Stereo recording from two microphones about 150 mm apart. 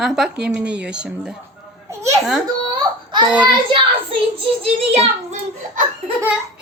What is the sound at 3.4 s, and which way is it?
Speech, 35° right (ahead or behind).